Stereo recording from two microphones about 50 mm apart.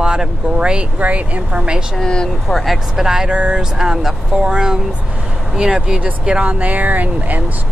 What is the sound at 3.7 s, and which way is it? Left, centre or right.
Speech, centre.